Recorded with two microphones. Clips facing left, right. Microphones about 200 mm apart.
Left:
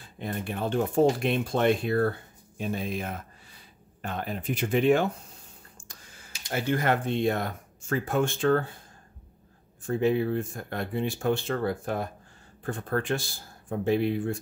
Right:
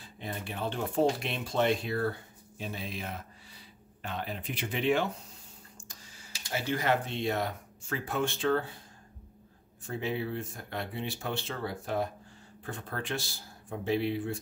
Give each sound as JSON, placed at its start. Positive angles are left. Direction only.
{"t": 0.0, "sound": "speech", "side_deg": 50}
{"t": 9.8, "sound": "speech", "side_deg": 50}